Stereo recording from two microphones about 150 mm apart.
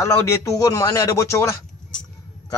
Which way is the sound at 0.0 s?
15° left (ahead or behind).